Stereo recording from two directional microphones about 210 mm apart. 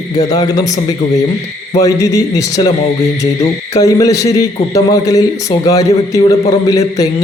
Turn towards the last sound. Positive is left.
turn(degrees=15)  # may be behind; listen again after turning